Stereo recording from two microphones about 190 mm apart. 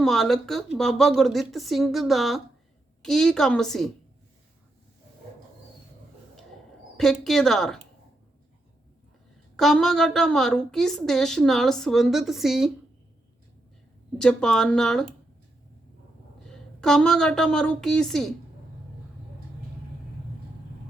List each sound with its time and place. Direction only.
0.0 s a woman's voice: centre (ahead or behind)
6.9 s a woman's voice: centre (ahead or behind)
9.6 s a woman's voice: centre (ahead or behind)
14.2 s a woman's voice: 5° left (ahead or behind)
16.5 s a woman's voice: 5° left (ahead or behind)